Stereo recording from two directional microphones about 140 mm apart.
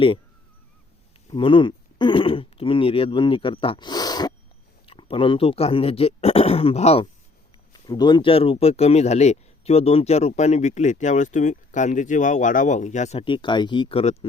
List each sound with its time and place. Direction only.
1.4 s speech: 35° left (ahead or behind)
4.9 s speech: 40° left (ahead or behind)
7.7 s speech: 30° left (ahead or behind); by 13.2 s 55° left (ahead or behind)
13.2 s speech: 35° left (ahead or behind)